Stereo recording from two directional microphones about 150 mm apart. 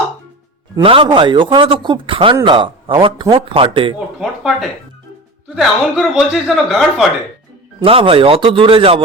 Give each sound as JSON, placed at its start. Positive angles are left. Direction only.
{"t": 0.8, "sound": "speech", "side_deg": -35}
{"t": 5.5, "sound": "speech", "side_deg": 0}
{"t": 7.8, "sound": "speech", "side_deg": -35}